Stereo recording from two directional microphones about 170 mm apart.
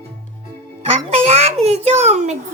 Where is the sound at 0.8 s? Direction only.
35° right (ahead or behind).